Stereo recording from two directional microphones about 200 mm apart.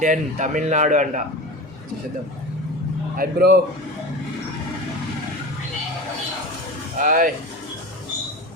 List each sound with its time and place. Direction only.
0.0 s speech: 40° right (ahead or behind)
3.2 s speech: 50° right (ahead or behind)
7.0 s speech: 45° right (ahead or behind)